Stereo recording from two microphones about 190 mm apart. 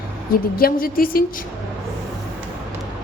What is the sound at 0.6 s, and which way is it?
Speech, 50° left (ahead or behind).